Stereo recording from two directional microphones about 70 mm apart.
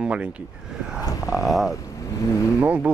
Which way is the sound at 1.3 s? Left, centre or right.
Centre.